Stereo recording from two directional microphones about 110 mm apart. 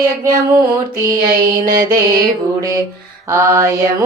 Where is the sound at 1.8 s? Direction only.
25° right (ahead or behind).